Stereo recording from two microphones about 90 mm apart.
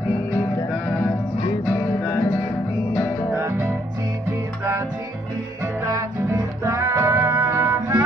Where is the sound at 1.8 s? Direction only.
20° left (ahead or behind).